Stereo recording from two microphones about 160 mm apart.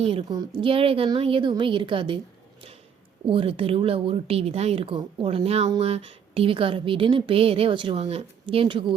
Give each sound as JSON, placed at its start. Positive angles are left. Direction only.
{"t": 0.0, "sound": "a woman's voice", "side_deg": -35}